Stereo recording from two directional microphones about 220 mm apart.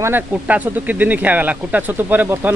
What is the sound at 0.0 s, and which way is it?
A man's voice, 10° right (ahead or behind).